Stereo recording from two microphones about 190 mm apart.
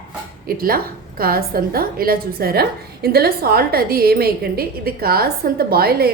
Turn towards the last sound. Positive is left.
turn(degrees=-55)  # may be behind; listen again after turning